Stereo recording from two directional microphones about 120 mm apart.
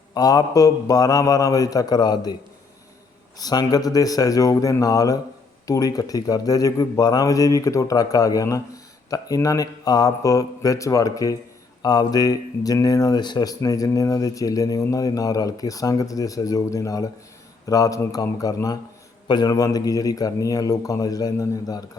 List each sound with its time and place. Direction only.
0.1 s a man's voice: 30° left (ahead or behind)
3.3 s a man's voice: 35° left (ahead or behind)